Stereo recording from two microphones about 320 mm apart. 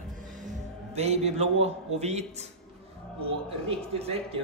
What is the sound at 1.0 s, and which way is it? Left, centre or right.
A man's voice, centre.